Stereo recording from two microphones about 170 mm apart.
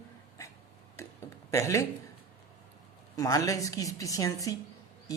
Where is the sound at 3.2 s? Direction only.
20° left (ahead or behind).